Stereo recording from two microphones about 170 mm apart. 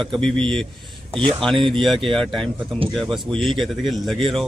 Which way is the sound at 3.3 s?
30° right (ahead or behind).